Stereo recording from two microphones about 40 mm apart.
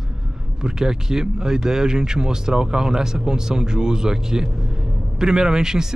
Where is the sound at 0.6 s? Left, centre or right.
Centre.